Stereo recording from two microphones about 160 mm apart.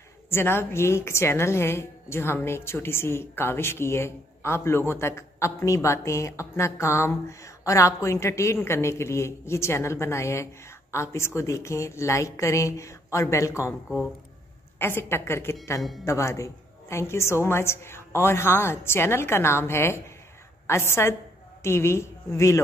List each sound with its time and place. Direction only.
0.3 s a woman's voice: 15° left (ahead or behind)
14.8 s a woman's voice: 15° left (ahead or behind)